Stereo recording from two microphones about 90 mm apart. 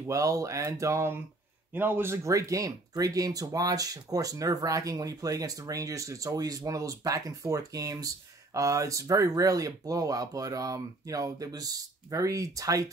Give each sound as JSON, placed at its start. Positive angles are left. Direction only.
{"t": 0.0, "sound": "a man's voice", "side_deg": -35}
{"t": 2.2, "sound": "speech", "side_deg": -35}